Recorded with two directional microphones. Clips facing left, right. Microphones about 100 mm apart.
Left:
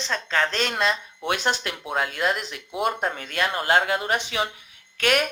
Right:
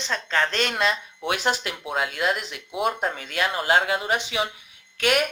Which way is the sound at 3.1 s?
45° left (ahead or behind).